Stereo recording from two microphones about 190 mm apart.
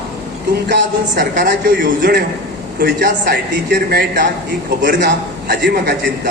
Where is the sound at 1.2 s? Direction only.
55° right (ahead or behind).